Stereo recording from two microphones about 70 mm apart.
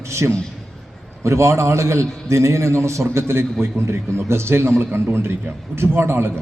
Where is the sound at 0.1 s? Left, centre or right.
Right.